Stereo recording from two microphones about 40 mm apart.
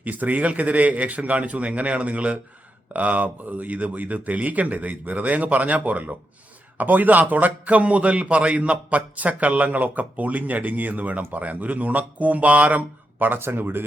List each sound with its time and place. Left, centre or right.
0.0 s a man's voice: right
13.4 s speech: right